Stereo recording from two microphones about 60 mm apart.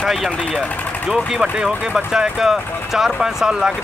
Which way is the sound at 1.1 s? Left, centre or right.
Centre.